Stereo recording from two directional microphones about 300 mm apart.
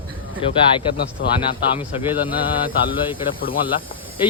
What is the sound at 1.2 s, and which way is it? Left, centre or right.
Speech, left.